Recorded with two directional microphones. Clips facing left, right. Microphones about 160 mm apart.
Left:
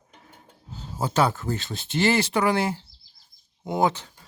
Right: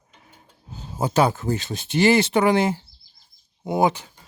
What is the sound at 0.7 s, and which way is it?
Speech, 15° right (ahead or behind).